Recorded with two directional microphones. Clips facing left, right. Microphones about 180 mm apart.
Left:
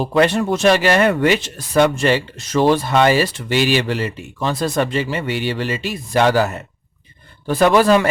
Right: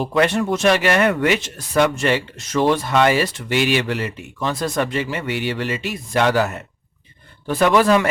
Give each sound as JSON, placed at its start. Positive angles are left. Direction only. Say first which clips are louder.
{"t": 0.0, "sound": "speech", "louder": "left 2 dB", "side_deg": 30}